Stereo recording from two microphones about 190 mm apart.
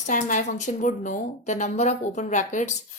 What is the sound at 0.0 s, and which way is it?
Speech, 40° left (ahead or behind).